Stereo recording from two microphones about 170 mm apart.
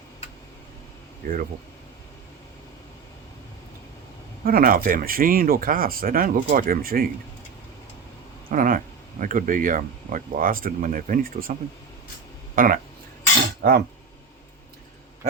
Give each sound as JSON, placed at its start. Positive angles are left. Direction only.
{"t": 1.2, "sound": "speech", "side_deg": -60}
{"t": 4.4, "sound": "speech", "side_deg": -55}
{"t": 8.4, "sound": "speech", "side_deg": -55}
{"t": 12.5, "sound": "speech", "side_deg": -55}